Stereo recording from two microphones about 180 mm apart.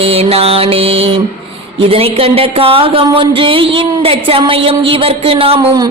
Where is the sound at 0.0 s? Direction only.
30° right (ahead or behind).